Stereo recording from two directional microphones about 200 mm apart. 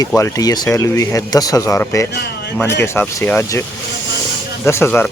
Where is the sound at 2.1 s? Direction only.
55° left (ahead or behind).